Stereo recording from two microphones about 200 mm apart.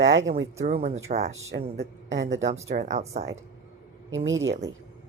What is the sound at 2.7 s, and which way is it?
Speech, 35° right (ahead or behind).